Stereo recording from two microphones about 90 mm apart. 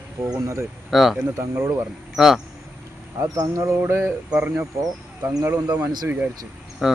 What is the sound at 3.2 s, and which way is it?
Speech, 40° right (ahead or behind).